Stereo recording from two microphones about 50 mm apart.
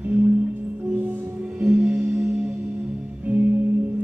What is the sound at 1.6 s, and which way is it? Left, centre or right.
Music, right.